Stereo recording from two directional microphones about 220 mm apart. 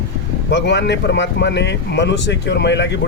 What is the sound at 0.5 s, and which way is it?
Speech, 50° left (ahead or behind).